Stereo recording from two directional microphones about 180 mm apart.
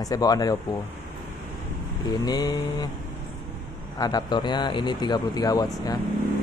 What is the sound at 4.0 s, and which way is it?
Speech, 25° left (ahead or behind).